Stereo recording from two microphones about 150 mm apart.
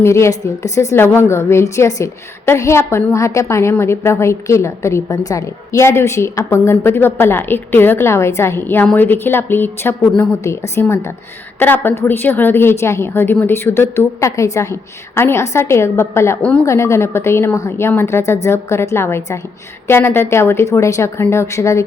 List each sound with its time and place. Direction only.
0.0 s a woman's voice: 20° left (ahead or behind)